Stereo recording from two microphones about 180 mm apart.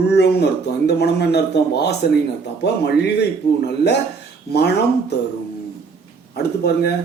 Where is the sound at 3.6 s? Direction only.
65° left (ahead or behind).